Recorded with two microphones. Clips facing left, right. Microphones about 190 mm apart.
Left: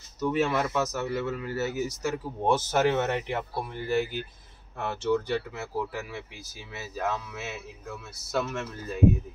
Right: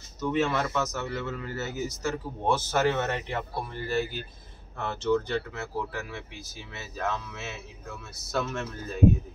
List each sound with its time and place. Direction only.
0.2 s speech: 5° left (ahead or behind)